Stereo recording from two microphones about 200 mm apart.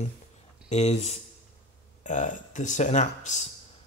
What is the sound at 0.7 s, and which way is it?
Speech, 35° left (ahead or behind).